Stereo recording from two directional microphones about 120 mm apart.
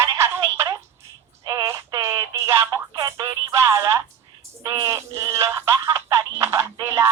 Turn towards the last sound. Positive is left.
turn(degrees=-25)  # may be behind; listen again after turning